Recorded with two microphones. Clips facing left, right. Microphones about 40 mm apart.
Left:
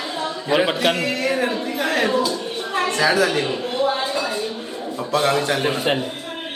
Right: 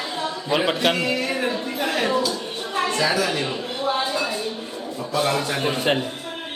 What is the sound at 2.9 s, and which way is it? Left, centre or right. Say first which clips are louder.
Speech: left 5 dB; left.